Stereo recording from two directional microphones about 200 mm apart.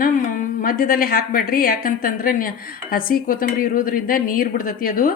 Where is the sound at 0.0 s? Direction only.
40° left (ahead or behind).